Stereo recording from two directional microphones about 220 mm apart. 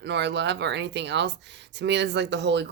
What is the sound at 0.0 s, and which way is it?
Speech, 50° right (ahead or behind).